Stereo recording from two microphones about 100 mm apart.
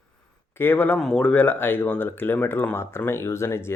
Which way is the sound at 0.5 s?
20° left (ahead or behind).